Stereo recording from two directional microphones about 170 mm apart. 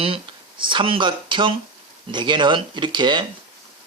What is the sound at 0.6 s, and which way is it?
Speech, 30° right (ahead or behind).